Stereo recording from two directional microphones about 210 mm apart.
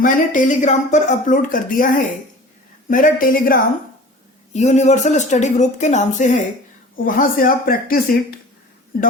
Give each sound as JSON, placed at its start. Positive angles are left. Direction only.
{"t": 0.0, "sound": "speech", "side_deg": 40}